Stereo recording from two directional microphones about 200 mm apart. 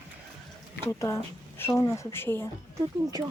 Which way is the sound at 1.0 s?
15° left (ahead or behind).